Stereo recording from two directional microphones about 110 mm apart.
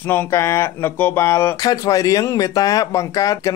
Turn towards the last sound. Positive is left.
turn(degrees=30)  # may be behind; listen again after turning